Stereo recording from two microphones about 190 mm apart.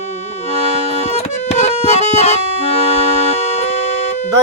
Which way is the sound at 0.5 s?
35° left (ahead or behind).